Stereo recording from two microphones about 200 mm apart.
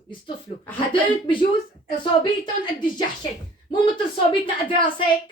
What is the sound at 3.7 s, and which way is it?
Speech, 25° left (ahead or behind).